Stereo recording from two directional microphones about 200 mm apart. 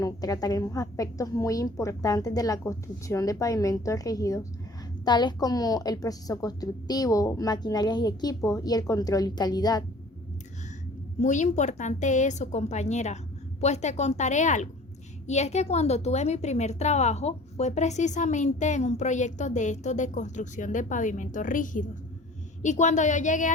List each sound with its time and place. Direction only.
0.0 s a woman's voice: 20° left (ahead or behind)
11.2 s a woman's voice: 35° left (ahead or behind)